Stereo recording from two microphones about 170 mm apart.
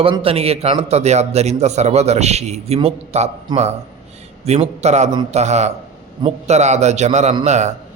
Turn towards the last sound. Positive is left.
turn(degrees=-40)  # may be behind; listen again after turning